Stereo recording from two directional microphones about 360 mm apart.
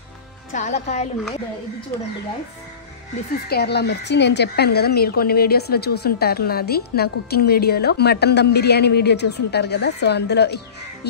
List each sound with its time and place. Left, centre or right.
0.5 s speech: centre
3.4 s speech: left